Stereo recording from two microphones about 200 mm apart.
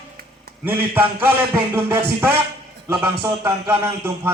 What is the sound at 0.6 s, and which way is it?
A man's voice, 10° right (ahead or behind).